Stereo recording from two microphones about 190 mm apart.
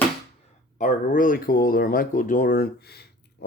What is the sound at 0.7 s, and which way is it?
Speech, 45° left (ahead or behind).